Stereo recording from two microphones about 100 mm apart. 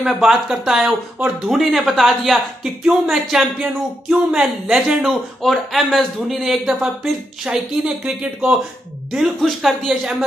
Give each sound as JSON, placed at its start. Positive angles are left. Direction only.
{"t": 0.0, "sound": "speech", "side_deg": -5}